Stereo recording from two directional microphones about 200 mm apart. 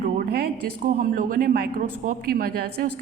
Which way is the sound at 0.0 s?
50° right (ahead or behind).